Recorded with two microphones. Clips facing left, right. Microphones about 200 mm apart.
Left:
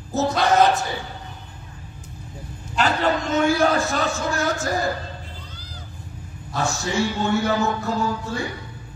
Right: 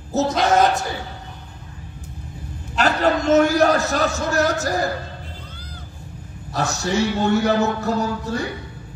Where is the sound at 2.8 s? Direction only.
40° right (ahead or behind).